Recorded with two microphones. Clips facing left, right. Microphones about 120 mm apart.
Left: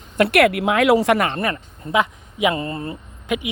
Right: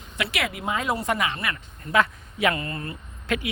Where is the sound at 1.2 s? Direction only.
50° left (ahead or behind).